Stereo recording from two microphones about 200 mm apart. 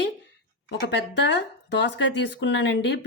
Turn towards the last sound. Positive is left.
turn(degrees=60)  # may be behind; listen again after turning